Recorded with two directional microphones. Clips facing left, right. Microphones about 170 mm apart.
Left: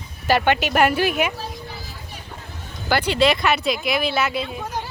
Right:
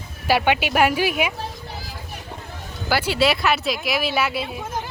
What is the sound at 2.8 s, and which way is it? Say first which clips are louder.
Speech: left 2 dB; 5° right (ahead or behind).